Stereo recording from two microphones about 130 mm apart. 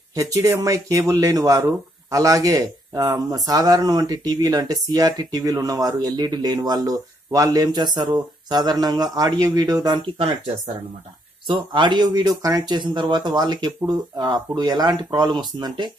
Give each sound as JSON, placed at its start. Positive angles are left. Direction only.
{"t": 0.1, "sound": "speech", "side_deg": -25}
{"t": 11.4, "sound": "speech", "side_deg": -40}